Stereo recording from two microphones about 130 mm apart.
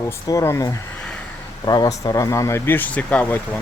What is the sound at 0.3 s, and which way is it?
Speech, 20° left (ahead or behind).